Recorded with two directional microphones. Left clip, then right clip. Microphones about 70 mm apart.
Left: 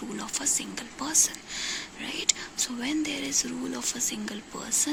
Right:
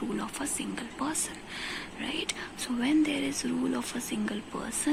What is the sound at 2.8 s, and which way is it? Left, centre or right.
Speech, centre.